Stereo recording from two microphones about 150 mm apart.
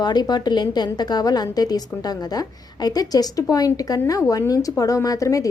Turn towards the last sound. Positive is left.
turn(degrees=20)  # may be behind; listen again after turning